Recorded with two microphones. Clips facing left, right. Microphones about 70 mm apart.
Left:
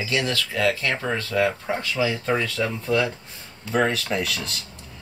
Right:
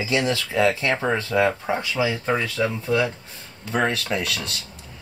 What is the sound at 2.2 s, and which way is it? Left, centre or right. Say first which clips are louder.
Speech: right 1 dB; centre.